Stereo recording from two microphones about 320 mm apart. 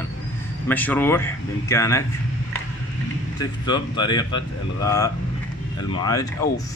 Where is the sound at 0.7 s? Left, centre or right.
Centre.